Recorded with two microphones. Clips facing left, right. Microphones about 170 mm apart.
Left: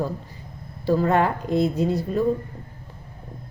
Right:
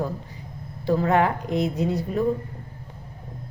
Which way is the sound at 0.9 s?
20° right (ahead or behind).